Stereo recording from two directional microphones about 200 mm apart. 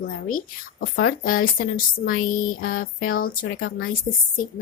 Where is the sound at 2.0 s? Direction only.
45° left (ahead or behind).